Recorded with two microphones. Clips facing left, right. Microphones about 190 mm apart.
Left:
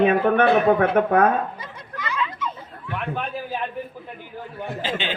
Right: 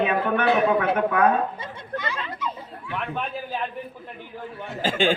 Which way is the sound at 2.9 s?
Centre (ahead or behind).